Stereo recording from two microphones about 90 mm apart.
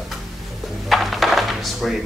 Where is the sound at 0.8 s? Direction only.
Centre (ahead or behind).